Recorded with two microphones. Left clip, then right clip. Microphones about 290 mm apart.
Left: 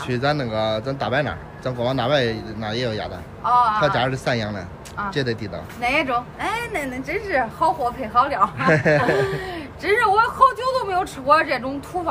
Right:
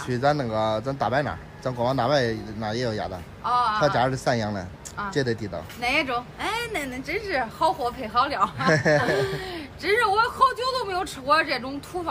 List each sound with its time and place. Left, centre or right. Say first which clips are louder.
0.0 s a man's voice: left 1 dB; centre